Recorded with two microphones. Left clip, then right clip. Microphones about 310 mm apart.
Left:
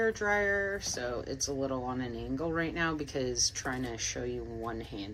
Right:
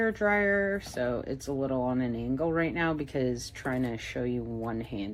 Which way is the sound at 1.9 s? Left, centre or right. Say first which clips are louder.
Right 5 dB; right.